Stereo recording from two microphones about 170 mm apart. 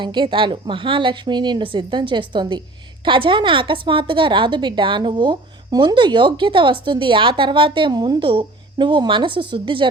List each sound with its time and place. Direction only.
0.0 s a woman's voice: 25° right (ahead or behind)